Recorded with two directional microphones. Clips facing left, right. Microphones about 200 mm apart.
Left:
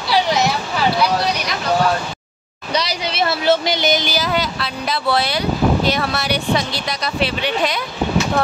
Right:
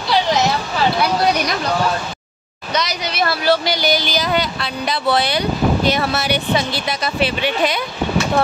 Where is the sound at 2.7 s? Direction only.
30° left (ahead or behind).